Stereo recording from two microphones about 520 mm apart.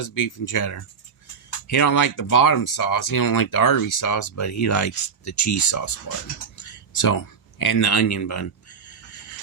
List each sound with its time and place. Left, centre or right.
0.0 s speech: left
6.6 s a sound: left
7.6 s speech: left